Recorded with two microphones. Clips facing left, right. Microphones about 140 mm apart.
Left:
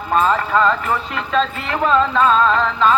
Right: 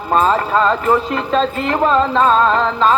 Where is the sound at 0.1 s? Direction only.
35° right (ahead or behind).